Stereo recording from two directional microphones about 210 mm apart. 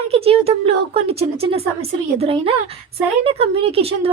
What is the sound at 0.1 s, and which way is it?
Speech, 30° right (ahead or behind).